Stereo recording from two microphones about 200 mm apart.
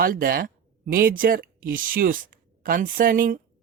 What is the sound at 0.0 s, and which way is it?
Speech, 45° right (ahead or behind).